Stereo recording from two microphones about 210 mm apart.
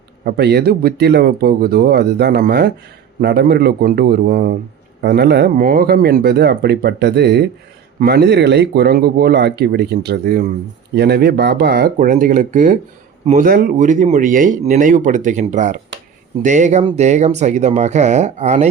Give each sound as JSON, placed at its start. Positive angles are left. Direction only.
{"t": 0.3, "sound": "speech", "side_deg": -50}